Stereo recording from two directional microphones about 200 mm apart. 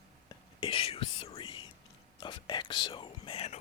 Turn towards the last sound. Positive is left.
turn(degrees=30)  # may be behind; listen again after turning